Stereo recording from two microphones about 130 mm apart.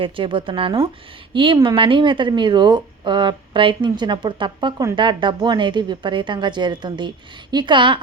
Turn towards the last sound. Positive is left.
turn(degrees=-40)  # may be behind; listen again after turning